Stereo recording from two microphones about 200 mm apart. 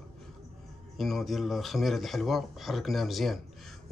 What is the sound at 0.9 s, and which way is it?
Speech, centre (ahead or behind).